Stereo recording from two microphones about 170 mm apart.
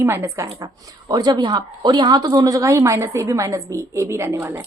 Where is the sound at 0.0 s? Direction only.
15° right (ahead or behind).